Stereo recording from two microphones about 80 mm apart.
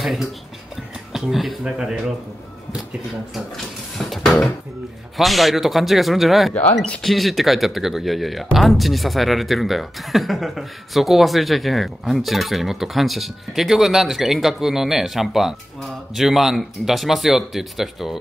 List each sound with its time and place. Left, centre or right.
0.0 s speech: centre
4.0 s a sound: centre
5.1 s speech: centre
6.5 s speech: centre
7.0 s speech: centre